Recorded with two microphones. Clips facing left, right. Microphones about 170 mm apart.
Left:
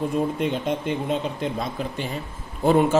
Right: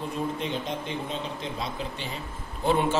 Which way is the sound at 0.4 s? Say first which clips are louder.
Left 6 dB; 55° left (ahead or behind).